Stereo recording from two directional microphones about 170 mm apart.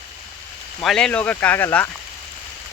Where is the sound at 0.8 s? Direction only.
5° left (ahead or behind).